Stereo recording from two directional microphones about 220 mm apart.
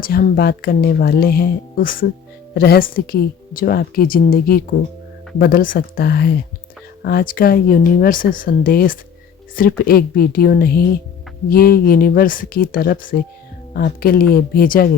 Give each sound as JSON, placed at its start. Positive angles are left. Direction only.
{"t": 0.0, "sound": "a woman's voice", "side_deg": 40}